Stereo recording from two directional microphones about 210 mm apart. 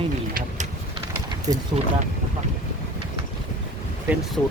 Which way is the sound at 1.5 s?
20° right (ahead or behind).